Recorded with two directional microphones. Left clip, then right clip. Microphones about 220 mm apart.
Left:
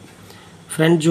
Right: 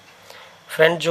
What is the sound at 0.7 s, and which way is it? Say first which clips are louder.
Speech: right 1 dB; 30° right (ahead or behind).